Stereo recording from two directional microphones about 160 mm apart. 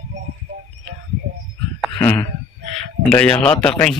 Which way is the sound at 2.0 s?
10° left (ahead or behind).